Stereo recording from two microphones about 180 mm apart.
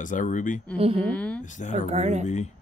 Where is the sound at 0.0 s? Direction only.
45° left (ahead or behind).